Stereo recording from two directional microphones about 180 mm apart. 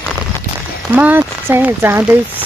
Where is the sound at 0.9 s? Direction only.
10° right (ahead or behind).